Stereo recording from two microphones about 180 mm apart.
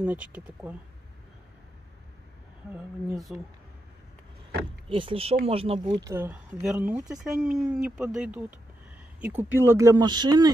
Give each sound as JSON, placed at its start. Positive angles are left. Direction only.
{"t": 0.0, "sound": "speech", "side_deg": -10}
{"t": 2.7, "sound": "speech", "side_deg": -5}
{"t": 4.8, "sound": "speech", "side_deg": -30}
{"t": 6.0, "sound": "speech", "side_deg": -15}